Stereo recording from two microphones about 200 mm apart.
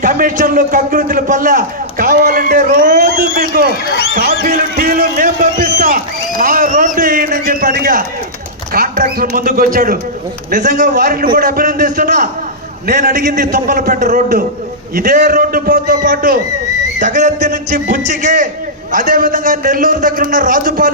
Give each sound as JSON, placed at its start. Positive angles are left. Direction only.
{"t": 0.0, "sound": "a man's voice", "side_deg": -45}